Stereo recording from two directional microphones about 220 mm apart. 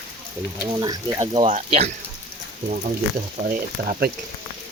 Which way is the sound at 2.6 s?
30° right (ahead or behind).